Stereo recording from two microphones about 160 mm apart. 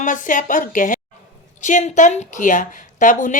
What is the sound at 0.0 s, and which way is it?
A woman's voice, 55° left (ahead or behind).